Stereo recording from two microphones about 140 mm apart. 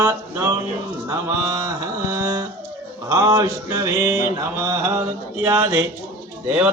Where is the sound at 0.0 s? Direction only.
15° right (ahead or behind).